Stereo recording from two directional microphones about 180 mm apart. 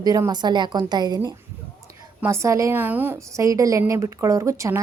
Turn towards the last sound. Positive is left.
turn(degrees=-15)  # may be behind; listen again after turning